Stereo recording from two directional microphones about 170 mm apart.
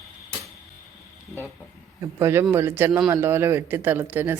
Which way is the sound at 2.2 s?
15° right (ahead or behind).